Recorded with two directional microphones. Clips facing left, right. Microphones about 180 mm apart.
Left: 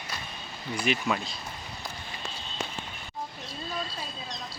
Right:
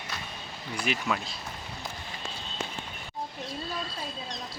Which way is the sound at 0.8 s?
Centre (ahead or behind).